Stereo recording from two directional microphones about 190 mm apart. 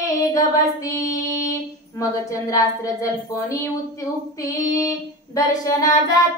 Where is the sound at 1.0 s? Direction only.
20° left (ahead or behind).